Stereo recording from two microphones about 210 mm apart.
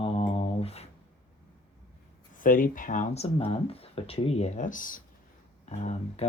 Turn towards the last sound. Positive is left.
turn(degrees=30)  # may be behind; listen again after turning